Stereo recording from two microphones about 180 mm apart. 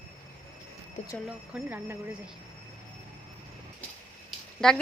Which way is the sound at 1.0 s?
40° left (ahead or behind).